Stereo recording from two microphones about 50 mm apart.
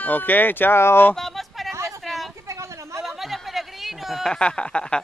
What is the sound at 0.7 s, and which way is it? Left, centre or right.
Speech, left.